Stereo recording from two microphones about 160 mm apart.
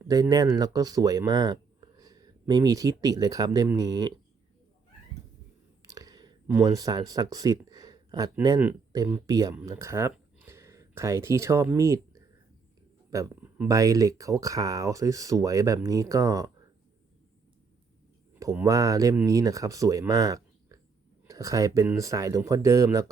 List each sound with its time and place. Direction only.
0.1 s speech: 25° right (ahead or behind)
5.8 s whispering: 20° right (ahead or behind)
6.5 s speech: 20° right (ahead or behind)
13.1 s speech: 20° right (ahead or behind)
18.5 s speech: 20° right (ahead or behind)